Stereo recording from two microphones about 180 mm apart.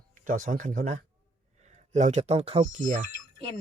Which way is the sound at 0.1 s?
45° right (ahead or behind).